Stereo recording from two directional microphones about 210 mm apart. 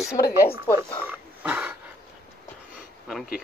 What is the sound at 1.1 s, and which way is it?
Pig, 10° right (ahead or behind).